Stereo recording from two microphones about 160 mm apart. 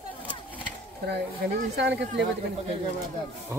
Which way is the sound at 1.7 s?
90° right.